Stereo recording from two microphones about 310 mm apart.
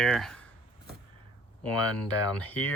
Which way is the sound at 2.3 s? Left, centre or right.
Centre.